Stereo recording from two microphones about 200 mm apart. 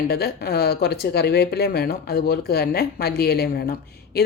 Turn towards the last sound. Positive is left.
turn(degrees=50)  # may be behind; listen again after turning